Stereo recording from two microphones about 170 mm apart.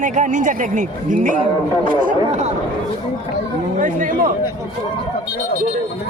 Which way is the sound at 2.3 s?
40° right (ahead or behind).